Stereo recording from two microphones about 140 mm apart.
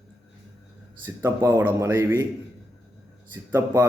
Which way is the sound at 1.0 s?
15° right (ahead or behind).